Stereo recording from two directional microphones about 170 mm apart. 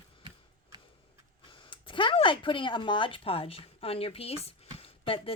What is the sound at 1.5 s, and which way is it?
Speech, 30° left (ahead or behind).